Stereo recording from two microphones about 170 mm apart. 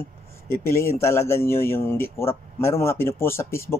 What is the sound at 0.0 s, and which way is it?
Speech, 15° left (ahead or behind).